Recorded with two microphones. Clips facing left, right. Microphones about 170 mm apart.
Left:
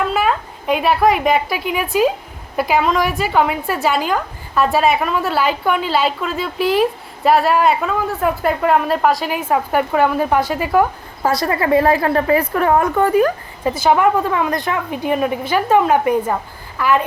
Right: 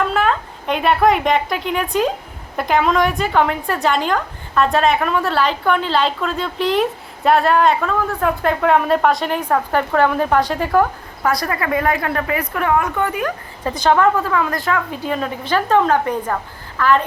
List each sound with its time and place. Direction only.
0.1 s a woman's voice: 5° left (ahead or behind)
11.2 s a woman's voice: 25° left (ahead or behind)
13.7 s speech: 10° left (ahead or behind)